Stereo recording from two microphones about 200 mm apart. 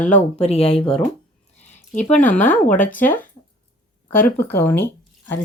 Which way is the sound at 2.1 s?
5° left (ahead or behind).